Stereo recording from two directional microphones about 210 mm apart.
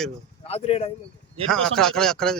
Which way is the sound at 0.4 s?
30° left (ahead or behind).